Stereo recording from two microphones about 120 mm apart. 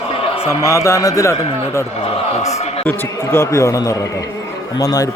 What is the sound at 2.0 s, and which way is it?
Speech, 65° left (ahead or behind).